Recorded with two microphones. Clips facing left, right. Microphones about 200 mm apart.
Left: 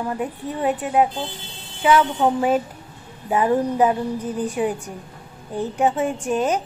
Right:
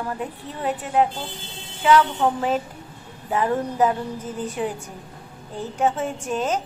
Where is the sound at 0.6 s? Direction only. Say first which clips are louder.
Left 2 dB; 15° left (ahead or behind).